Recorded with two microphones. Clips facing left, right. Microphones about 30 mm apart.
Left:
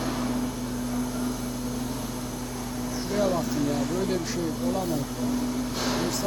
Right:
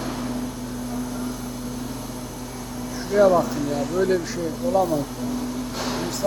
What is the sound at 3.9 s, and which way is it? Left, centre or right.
Speech, centre.